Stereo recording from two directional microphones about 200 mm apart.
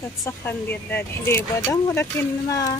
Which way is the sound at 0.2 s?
10° left (ahead or behind).